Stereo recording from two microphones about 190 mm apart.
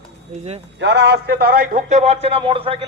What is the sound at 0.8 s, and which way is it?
Speech, 60° right (ahead or behind).